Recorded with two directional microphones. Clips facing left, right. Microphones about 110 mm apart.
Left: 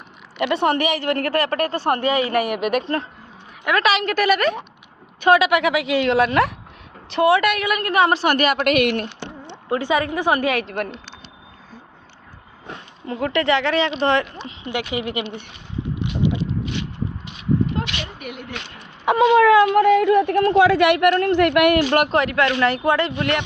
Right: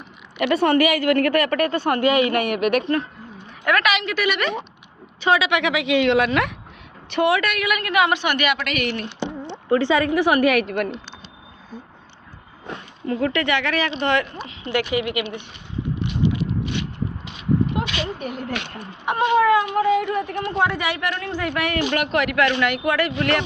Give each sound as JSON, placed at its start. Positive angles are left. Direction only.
{"t": 0.3, "sound": "a woman's voice", "side_deg": 25}
{"t": 3.6, "sound": "a woman's voice", "side_deg": 20}
{"t": 3.8, "sound": "a woman's voice", "side_deg": 40}
{"t": 9.5, "sound": "speech", "side_deg": 15}
{"t": 13.1, "sound": "speech", "side_deg": 15}
{"t": 13.4, "sound": "a woman's voice", "side_deg": 30}
{"t": 15.0, "sound": "a woman's voice", "side_deg": 35}
{"t": 16.2, "sound": "mechanisms", "side_deg": 25}
{"t": 17.8, "sound": "a sound", "side_deg": -15}
{"t": 18.2, "sound": "speech", "side_deg": -35}
{"t": 19.4, "sound": "speech", "side_deg": 90}
{"t": 20.4, "sound": "speech", "side_deg": 90}
{"t": 22.1, "sound": "speech", "side_deg": 30}